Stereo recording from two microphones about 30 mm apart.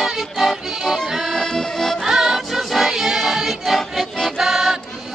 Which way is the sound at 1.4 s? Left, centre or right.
Centre.